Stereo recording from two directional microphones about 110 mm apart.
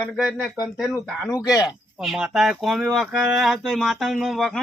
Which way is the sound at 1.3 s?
35° left (ahead or behind).